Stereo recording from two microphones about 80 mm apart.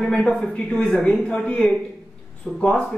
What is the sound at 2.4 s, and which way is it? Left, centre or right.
Speech, centre.